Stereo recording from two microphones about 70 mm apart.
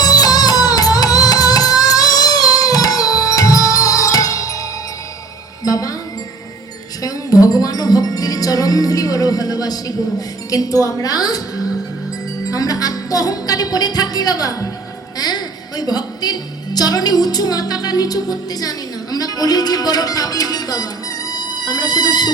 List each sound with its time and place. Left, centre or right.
0.0 s music: left
5.6 s music: left
7.0 s music: left
15.2 s a woman's voice: left